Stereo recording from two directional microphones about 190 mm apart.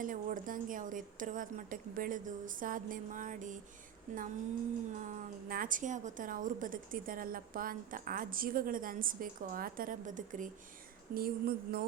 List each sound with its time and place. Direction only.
0.0 s a woman's voice: 45° right (ahead or behind)
4.9 s a woman's voice: 45° right (ahead or behind)